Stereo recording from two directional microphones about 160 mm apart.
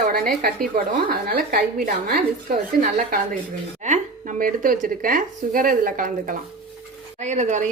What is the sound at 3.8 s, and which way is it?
Speech, 50° right (ahead or behind).